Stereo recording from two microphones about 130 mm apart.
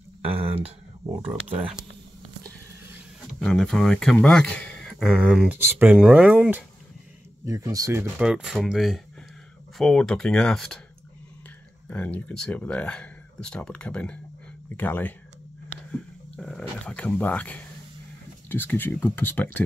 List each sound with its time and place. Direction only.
0.3 s a sound: 45° right (ahead or behind)
1.6 s speech: 5° right (ahead or behind)
3.3 s speech: 5° left (ahead or behind)
7.4 s speech: 25° right (ahead or behind)
8.2 s speech: 5° right (ahead or behind)
11.9 s speech: 10° left (ahead or behind)